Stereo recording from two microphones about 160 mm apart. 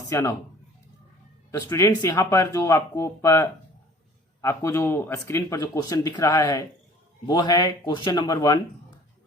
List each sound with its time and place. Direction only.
0.1 s speech: 15° left (ahead or behind)
1.5 s speech: 20° left (ahead or behind)